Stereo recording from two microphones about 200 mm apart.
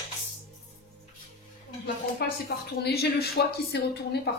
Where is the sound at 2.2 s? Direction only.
55° left (ahead or behind).